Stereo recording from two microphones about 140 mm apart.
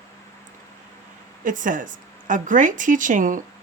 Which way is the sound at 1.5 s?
70° right (ahead or behind).